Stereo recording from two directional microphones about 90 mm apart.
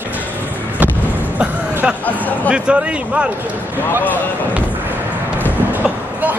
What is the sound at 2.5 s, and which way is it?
Speech, 10° right (ahead or behind).